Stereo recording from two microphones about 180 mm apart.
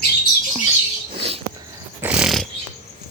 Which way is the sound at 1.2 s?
35° right (ahead or behind).